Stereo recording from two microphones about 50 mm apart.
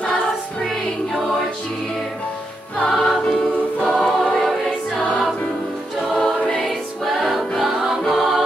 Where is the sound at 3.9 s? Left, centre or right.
Centre.